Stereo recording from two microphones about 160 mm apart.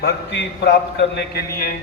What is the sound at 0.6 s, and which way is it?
Speech, 90° left.